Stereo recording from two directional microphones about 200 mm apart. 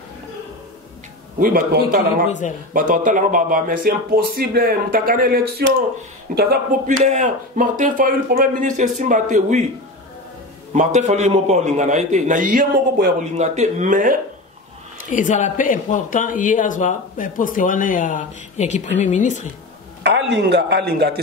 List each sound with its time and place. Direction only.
1.4 s speech: 45° right (ahead or behind)
2.2 s speech: 40° left (ahead or behind)
2.7 s a man's voice: 40° right (ahead or behind)
10.7 s a man's voice: 35° right (ahead or behind)
15.0 s speech: 40° left (ahead or behind)
20.0 s a man's voice: 60° right (ahead or behind)